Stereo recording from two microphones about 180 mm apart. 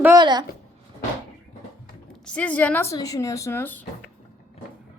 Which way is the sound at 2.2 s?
5° left (ahead or behind).